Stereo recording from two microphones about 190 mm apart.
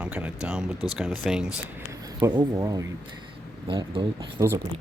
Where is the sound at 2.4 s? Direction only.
20° right (ahead or behind).